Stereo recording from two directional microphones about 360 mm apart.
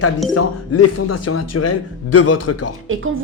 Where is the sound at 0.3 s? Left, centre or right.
Left.